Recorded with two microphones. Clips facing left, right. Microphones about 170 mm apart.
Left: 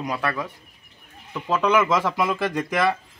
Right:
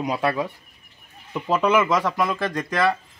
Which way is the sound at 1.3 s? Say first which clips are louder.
Right 1 dB; 10° right (ahead or behind).